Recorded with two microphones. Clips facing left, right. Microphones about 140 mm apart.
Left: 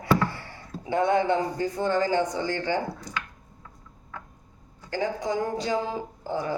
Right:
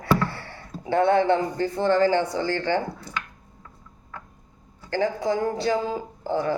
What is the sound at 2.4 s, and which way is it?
Speech, 15° left (ahead or behind).